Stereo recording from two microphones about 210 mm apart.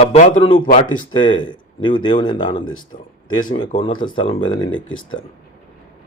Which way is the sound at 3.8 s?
25° left (ahead or behind).